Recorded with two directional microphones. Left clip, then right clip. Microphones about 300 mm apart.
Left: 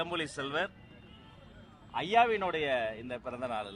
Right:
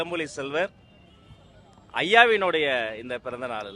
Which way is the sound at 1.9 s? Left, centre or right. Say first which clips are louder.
Right 9 dB; centre.